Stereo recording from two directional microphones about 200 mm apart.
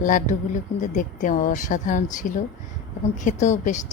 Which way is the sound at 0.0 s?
40° left (ahead or behind).